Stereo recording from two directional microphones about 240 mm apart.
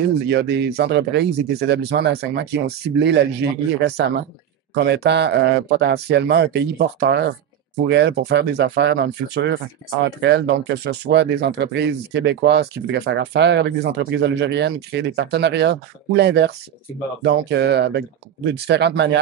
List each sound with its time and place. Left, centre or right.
0.3 s speech: right